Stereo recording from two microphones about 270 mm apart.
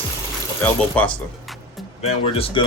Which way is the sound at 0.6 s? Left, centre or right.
Centre.